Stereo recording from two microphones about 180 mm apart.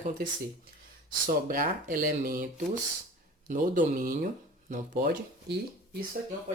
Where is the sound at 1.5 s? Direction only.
50° right (ahead or behind).